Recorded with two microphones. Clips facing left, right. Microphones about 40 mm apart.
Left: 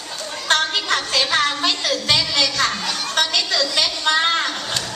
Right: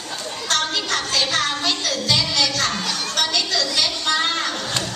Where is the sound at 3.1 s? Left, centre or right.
Left.